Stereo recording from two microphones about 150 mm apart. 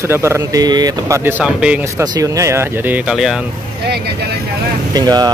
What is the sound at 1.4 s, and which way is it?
Speech, 5° right (ahead or behind).